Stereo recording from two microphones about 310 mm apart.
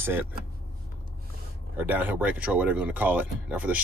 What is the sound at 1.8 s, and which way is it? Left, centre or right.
Speech, centre.